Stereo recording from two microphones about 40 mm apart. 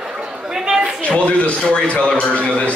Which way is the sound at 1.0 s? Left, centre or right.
Left.